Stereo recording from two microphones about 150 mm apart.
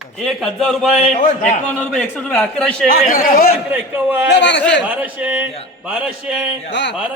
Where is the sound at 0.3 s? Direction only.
Centre (ahead or behind).